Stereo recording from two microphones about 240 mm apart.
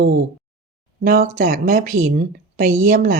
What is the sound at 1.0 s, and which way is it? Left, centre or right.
Speech, right.